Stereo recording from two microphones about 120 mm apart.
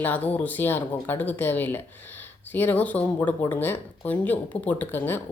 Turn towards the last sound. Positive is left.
turn(degrees=15)  # may be behind; listen again after turning